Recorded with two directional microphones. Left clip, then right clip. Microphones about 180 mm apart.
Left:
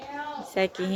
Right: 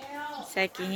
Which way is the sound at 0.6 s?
15° left (ahead or behind).